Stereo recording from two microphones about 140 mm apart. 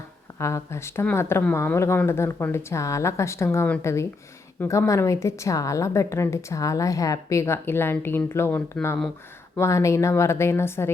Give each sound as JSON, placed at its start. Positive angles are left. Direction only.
{"t": 0.3, "sound": "a woman's voice", "side_deg": 20}